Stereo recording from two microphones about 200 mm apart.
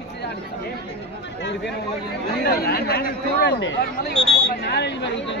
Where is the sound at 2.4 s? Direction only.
50° left (ahead or behind).